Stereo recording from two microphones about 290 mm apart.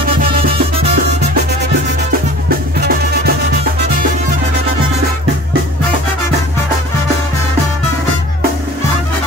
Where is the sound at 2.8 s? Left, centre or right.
Right.